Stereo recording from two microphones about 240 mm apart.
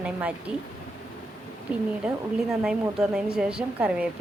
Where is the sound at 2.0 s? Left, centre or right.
Centre.